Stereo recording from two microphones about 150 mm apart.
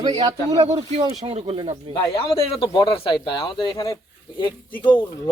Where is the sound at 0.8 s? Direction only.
45° right (ahead or behind).